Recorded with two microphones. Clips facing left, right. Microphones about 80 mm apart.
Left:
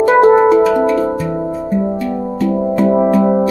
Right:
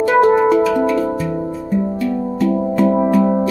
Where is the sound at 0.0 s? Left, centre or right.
Left.